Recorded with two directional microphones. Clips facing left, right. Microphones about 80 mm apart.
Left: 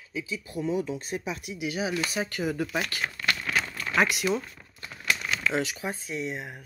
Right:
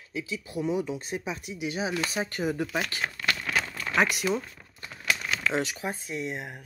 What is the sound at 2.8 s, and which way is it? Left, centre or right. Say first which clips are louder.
Speech: even; right.